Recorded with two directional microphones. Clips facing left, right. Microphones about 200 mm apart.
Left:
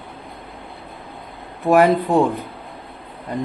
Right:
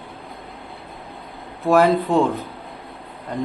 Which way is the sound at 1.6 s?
15° left (ahead or behind).